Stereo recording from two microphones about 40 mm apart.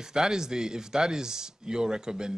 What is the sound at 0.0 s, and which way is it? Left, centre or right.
Speech, centre.